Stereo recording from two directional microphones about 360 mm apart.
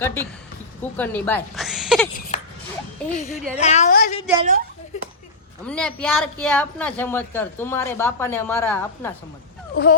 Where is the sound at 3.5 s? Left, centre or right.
Centre.